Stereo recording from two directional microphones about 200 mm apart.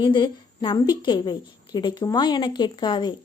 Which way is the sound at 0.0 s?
25° left (ahead or behind).